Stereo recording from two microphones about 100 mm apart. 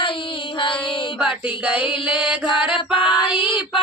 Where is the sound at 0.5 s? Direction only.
55° left (ahead or behind).